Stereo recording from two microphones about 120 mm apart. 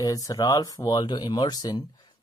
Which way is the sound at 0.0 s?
30° left (ahead or behind).